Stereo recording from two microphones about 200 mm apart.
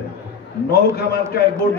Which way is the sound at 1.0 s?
50° left (ahead or behind).